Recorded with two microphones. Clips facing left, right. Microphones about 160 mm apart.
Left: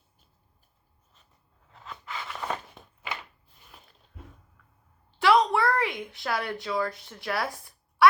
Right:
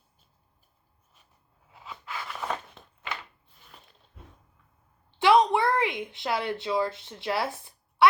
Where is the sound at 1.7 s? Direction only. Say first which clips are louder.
Even; 5° right (ahead or behind).